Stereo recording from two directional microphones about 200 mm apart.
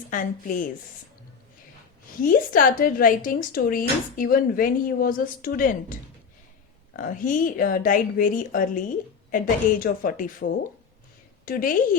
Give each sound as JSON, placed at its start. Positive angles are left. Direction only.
{"t": 0.1, "sound": "speech", "side_deg": 40}
{"t": 2.2, "sound": "speech", "side_deg": 45}
{"t": 11.4, "sound": "speech", "side_deg": 45}